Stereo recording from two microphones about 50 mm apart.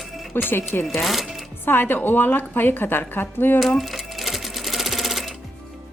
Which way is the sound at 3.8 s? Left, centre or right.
Centre.